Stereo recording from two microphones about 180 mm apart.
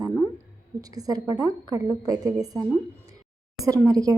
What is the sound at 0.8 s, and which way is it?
A woman's voice, 20° right (ahead or behind).